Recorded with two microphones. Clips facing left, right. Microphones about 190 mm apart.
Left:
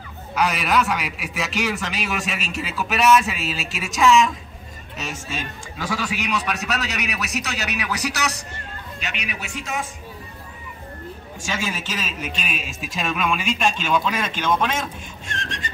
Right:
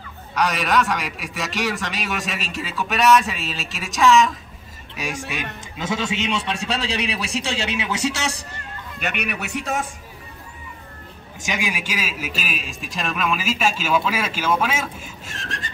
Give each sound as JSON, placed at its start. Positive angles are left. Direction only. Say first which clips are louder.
{"t": 0.3, "sound": "a man's voice", "louder": "even", "side_deg": 0}
{"t": 4.9, "sound": "a man's voice", "louder": "right 2 dB", "side_deg": -15}
{"t": 9.0, "sound": "a man's voice", "louder": "right 6 dB", "side_deg": -60}
{"t": 11.4, "sound": "a man's voice", "louder": "right 1 dB", "side_deg": -15}